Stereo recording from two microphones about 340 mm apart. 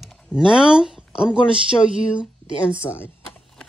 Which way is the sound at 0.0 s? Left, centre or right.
Centre.